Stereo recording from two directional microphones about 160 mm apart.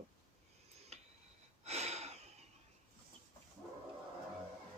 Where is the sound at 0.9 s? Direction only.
40° right (ahead or behind).